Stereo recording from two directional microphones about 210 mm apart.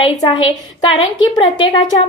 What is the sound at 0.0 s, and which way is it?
A woman's voice, 25° left (ahead or behind).